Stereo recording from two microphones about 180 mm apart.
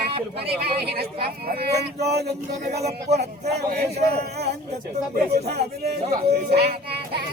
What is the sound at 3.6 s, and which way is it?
Speech, 60° right (ahead or behind).